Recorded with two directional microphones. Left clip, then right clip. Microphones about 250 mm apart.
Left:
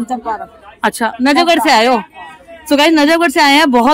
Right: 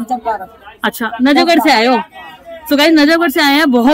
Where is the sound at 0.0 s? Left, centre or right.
Centre.